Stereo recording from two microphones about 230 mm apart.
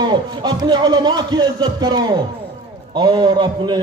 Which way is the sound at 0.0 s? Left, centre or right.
Centre.